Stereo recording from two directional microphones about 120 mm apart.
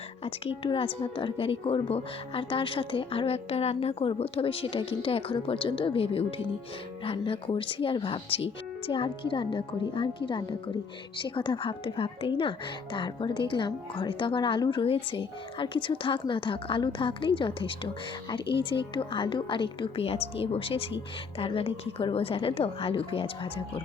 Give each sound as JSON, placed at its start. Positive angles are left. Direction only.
{"t": 0.3, "sound": "a woman's voice", "side_deg": 50}